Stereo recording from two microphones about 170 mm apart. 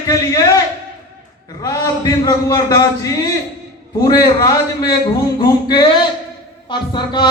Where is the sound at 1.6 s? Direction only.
20° left (ahead or behind).